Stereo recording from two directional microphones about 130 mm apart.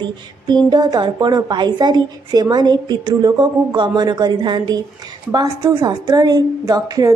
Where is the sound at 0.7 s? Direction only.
30° right (ahead or behind).